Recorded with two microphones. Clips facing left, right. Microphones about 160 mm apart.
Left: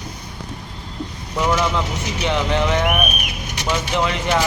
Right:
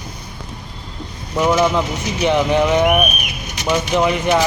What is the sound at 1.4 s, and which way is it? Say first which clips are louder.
A man's voice: right 4 dB; 15° right (ahead or behind).